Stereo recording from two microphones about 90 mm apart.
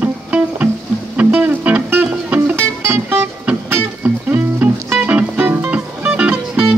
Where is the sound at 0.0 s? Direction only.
15° right (ahead or behind).